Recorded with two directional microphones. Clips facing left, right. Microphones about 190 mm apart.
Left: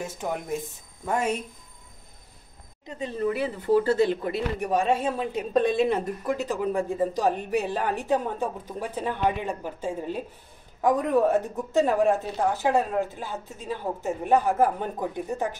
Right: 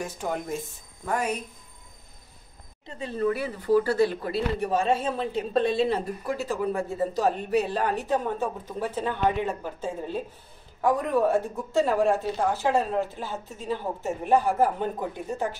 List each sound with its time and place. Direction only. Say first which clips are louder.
0.0 s a woman's voice: even; 15° left (ahead or behind)
2.8 s speech: right 1 dB; 20° left (ahead or behind)